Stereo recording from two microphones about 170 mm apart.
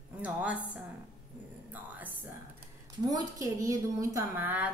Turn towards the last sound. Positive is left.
turn(degrees=-10)  # may be behind; listen again after turning